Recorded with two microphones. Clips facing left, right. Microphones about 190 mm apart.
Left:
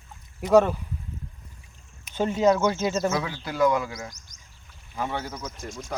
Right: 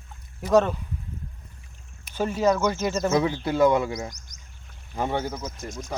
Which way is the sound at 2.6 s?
15° right (ahead or behind).